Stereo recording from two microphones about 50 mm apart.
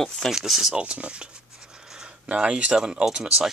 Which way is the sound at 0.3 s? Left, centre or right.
Centre.